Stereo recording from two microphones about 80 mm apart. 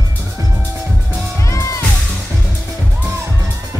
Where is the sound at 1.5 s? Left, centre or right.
Left.